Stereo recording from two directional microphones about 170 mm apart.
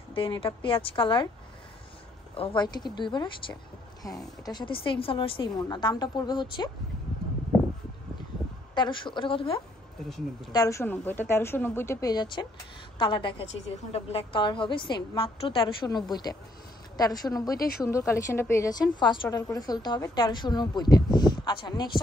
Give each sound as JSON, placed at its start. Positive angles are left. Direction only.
{"t": 0.1, "sound": "a woman's voice", "side_deg": 30}
{"t": 2.3, "sound": "a woman's voice", "side_deg": 30}
{"t": 8.7, "sound": "a woman's voice", "side_deg": 25}
{"t": 10.0, "sound": "speech", "side_deg": 0}
{"t": 10.5, "sound": "a woman's voice", "side_deg": 20}
{"t": 17.6, "sound": "speech", "side_deg": 65}
{"t": 17.8, "sound": "a woman's voice", "side_deg": 15}